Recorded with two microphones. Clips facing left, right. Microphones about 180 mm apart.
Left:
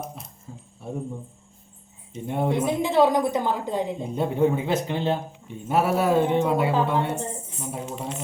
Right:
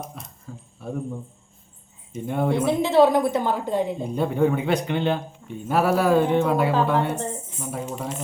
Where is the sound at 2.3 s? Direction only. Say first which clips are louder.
Right 2 dB; 20° left (ahead or behind).